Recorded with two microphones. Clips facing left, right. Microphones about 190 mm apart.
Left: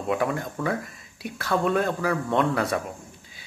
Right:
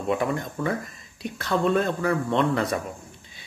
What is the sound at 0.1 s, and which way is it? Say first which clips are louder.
A man's voice: even; 5° left (ahead or behind).